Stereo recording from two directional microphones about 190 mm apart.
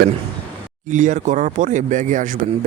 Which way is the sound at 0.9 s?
40° right (ahead or behind).